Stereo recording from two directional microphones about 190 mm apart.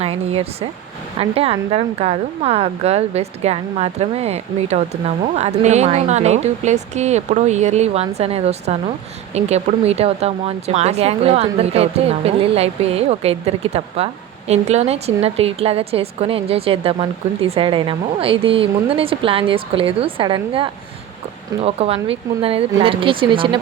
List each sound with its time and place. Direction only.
0.0 s speech: 30° right (ahead or behind)